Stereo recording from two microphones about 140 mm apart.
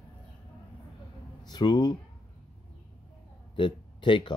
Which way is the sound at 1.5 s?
30° left (ahead or behind).